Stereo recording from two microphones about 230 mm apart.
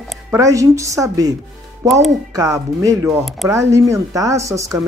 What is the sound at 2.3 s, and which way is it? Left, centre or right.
Speech, centre.